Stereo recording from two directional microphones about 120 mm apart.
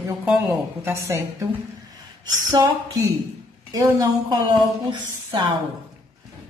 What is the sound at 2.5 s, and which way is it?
Speech, 30° right (ahead or behind).